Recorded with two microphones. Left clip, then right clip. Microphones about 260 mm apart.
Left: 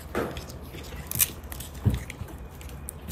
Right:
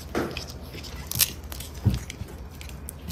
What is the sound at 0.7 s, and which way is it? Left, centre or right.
Biting, right.